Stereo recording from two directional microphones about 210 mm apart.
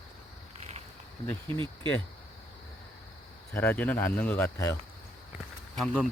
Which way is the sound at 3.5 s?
10° left (ahead or behind).